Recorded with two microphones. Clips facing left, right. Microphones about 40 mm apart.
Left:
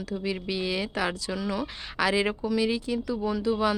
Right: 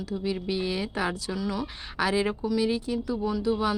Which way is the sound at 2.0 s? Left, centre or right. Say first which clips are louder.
Left 1 dB; left.